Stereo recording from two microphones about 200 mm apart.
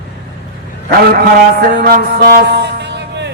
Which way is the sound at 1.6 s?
50° right (ahead or behind).